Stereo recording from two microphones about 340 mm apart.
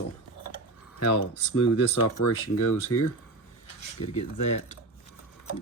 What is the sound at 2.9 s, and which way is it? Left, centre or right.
Speech, left.